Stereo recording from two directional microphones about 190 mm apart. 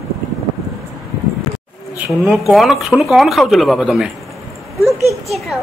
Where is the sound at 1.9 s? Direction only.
5° right (ahead or behind).